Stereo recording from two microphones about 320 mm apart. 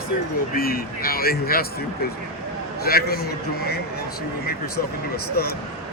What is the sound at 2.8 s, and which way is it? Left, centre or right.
Speech, left.